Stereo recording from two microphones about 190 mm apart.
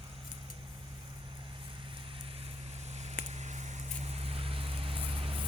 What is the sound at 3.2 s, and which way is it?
Vehicle, 35° right (ahead or behind).